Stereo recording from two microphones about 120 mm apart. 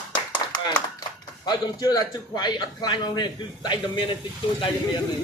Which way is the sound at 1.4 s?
35° left (ahead or behind).